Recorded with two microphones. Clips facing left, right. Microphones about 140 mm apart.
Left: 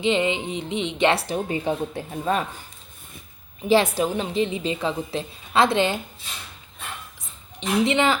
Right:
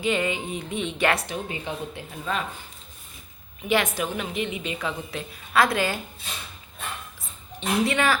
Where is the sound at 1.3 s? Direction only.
35° left (ahead or behind).